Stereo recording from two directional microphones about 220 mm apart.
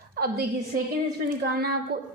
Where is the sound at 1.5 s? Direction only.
45° right (ahead or behind).